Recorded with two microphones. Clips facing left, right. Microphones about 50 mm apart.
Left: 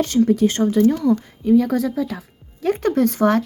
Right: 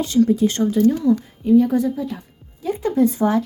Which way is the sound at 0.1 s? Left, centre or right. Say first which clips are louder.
Right 1 dB; centre.